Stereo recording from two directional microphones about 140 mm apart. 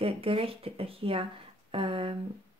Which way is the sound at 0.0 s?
45° right (ahead or behind).